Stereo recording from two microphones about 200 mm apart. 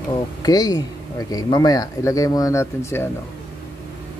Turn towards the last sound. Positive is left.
turn(degrees=15)  # may be behind; listen again after turning